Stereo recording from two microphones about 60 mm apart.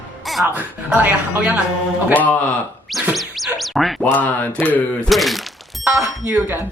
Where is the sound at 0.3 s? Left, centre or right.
Centre.